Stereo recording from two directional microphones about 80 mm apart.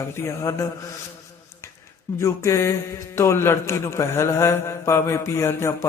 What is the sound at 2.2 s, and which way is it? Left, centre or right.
A man's voice, left.